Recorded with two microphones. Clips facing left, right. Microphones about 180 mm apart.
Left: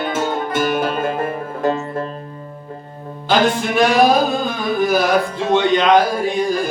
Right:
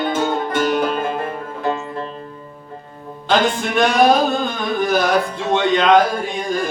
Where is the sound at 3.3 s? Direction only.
5° left (ahead or behind).